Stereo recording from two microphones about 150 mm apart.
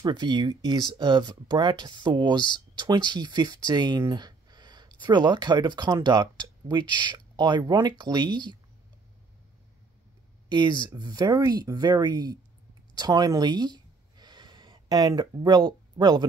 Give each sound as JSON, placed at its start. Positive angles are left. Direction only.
{"t": 0.0, "sound": "speech", "side_deg": -30}
{"t": 10.5, "sound": "speech", "side_deg": -30}
{"t": 12.9, "sound": "a sound", "side_deg": -25}